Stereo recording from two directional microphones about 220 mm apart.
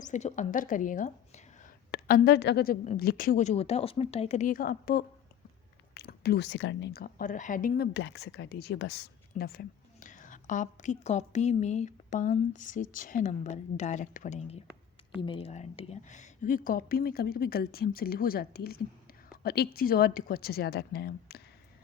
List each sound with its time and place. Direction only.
0.0 s a woman's voice: 30° left (ahead or behind)
7.9 s speech: 50° left (ahead or behind)
9.3 s a woman's voice: 45° left (ahead or behind)